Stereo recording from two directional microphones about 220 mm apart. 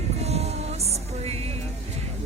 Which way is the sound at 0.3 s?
30° right (ahead or behind).